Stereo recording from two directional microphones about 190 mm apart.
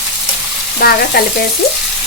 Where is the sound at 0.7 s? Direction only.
55° left (ahead or behind).